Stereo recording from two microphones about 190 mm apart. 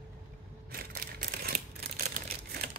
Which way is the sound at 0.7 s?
50° right (ahead or behind).